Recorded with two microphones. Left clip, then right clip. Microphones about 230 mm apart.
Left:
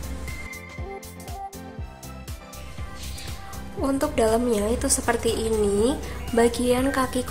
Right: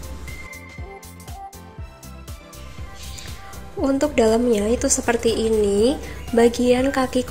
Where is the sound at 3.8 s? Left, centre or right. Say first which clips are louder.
Right 4 dB; centre.